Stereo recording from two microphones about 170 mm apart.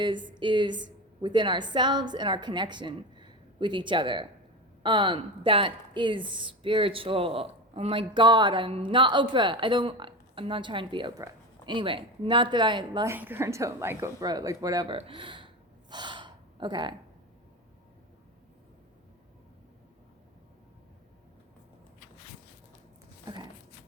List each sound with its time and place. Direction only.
0.0 s a woman's voice: 25° right (ahead or behind)
13.1 s a woman's voice: 10° right (ahead or behind); by 15.4 s 30° right (ahead or behind)
15.9 s gasp: 25° right (ahead or behind)
23.2 s a sound: 25° right (ahead or behind)